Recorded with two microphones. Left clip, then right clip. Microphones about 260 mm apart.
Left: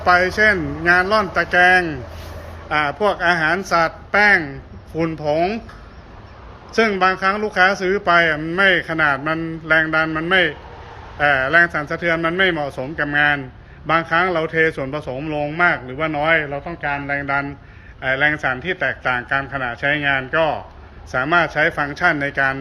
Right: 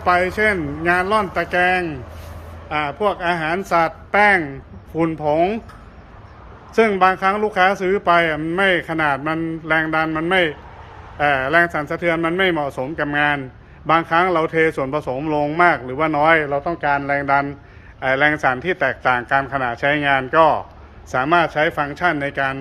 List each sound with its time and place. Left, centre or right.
0.0 s speech: centre
6.7 s speech: centre